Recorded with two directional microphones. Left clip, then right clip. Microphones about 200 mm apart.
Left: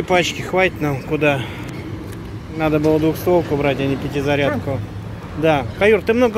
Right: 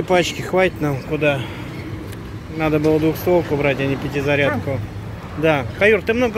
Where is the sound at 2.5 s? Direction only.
Centre (ahead or behind).